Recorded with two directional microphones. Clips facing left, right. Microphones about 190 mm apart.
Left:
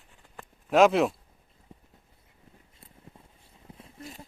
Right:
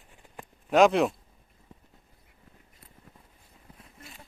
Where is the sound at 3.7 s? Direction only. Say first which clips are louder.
Left 7 dB; 30° left (ahead or behind).